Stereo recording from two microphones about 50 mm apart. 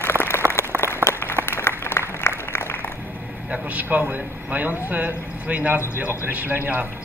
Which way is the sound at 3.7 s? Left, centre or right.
Right.